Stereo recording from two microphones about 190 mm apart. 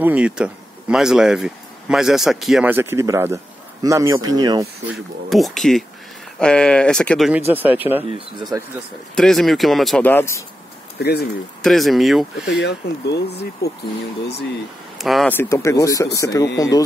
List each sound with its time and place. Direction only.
0.0 s speech: 5° right (ahead or behind)
4.9 s speech: centre (ahead or behind)
8.1 s speech: 20° right (ahead or behind)
9.1 s speech: centre (ahead or behind)
11.0 s speech: 55° left (ahead or behind)
11.6 s speech: centre (ahead or behind)
12.4 s speech: 65° left (ahead or behind)
15.0 s speech: centre (ahead or behind)
15.3 s speech: 15° left (ahead or behind)